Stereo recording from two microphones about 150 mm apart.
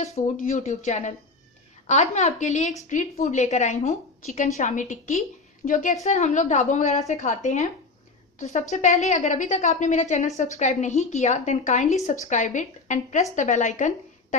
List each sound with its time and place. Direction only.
0.0 s a woman's voice: 50° left (ahead or behind)